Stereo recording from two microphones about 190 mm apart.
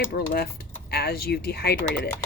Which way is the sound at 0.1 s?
55° left (ahead or behind).